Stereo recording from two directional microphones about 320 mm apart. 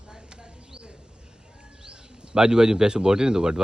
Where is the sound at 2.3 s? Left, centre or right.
Centre.